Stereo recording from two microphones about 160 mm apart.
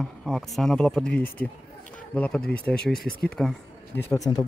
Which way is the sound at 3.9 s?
15° left (ahead or behind).